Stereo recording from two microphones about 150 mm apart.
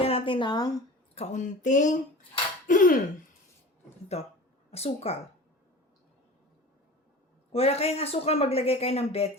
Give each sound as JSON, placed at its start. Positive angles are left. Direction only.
{"t": 0.0, "sound": "speech", "side_deg": 35}
{"t": 1.1, "sound": "a man's voice", "side_deg": 50}
{"t": 2.6, "sound": "a sound", "side_deg": 65}
{"t": 4.1, "sound": "a man's voice", "side_deg": 45}
{"t": 7.5, "sound": "a man's voice", "side_deg": 40}